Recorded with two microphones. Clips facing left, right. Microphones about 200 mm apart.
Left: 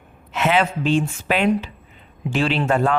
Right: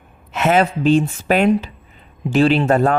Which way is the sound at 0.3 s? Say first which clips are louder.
Right 3 dB; 45° right (ahead or behind).